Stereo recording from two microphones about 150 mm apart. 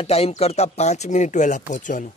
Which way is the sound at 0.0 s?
40° left (ahead or behind).